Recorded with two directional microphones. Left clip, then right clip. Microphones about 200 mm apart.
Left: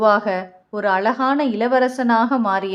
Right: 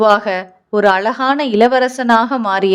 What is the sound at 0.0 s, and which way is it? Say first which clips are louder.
A woman's voice: right 4 dB; 40° right (ahead or behind).